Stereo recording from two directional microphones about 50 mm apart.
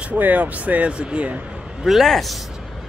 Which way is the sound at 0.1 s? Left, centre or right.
Right.